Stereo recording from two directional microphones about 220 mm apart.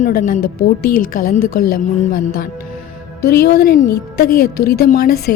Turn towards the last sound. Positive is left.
turn(degrees=40)  # may be behind; listen again after turning